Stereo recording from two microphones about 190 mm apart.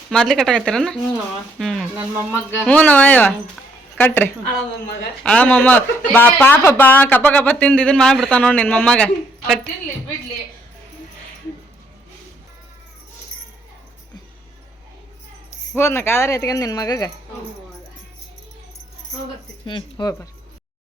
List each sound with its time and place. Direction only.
0.1 s a woman's voice: centre (ahead or behind)
15.7 s speech: 15° left (ahead or behind)
19.6 s speech: 25° left (ahead or behind)